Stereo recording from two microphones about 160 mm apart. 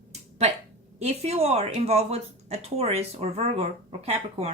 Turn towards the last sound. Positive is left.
turn(degrees=-40)  # may be behind; listen again after turning